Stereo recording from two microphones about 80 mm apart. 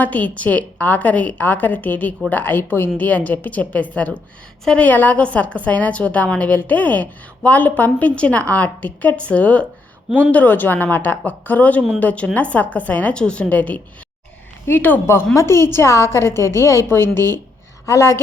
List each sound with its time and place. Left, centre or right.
0.0 s a woman's voice: centre
10.1 s speech: centre
10.3 s a woman's voice: left